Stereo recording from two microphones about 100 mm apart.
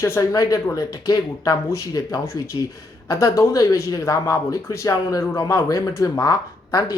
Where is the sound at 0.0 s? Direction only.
30° left (ahead or behind).